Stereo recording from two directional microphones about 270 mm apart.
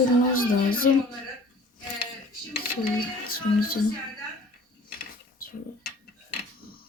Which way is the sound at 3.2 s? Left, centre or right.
Left.